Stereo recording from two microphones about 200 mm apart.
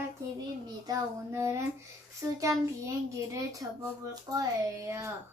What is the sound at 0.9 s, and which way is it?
Speech, 15° right (ahead or behind).